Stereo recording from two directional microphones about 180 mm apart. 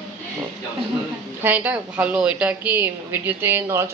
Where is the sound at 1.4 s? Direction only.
10° right (ahead or behind).